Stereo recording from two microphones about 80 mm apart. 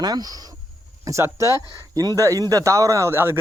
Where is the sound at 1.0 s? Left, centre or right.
Right.